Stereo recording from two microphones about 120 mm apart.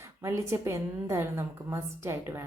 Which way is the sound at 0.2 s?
20° right (ahead or behind).